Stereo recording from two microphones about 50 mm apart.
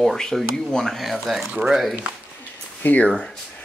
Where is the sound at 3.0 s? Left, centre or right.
Centre.